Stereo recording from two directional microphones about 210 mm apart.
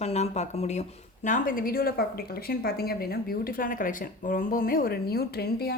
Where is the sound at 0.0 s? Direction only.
30° left (ahead or behind); by 5.7 s 50° left (ahead or behind).